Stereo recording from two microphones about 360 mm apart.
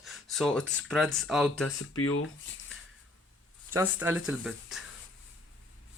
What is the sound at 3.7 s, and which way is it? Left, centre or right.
Speech, centre.